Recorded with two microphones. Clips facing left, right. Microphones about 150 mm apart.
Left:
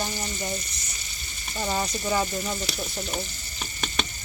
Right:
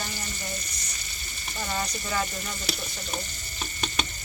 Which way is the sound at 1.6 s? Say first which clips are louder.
Left 4 dB; 20° left (ahead or behind).